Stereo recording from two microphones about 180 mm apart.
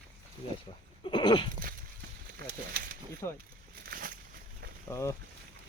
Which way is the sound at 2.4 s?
55° right (ahead or behind).